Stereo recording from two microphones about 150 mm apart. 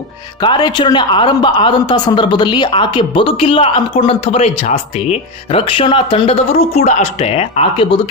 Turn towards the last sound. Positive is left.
turn(degrees=40)  # may be behind; listen again after turning